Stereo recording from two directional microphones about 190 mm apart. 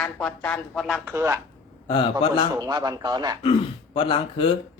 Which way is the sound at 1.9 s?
25° left (ahead or behind).